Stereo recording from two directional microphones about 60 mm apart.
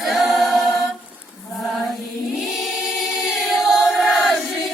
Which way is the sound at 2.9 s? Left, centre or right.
Centre.